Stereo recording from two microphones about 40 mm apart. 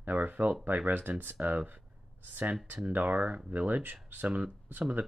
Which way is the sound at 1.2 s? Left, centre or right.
Right.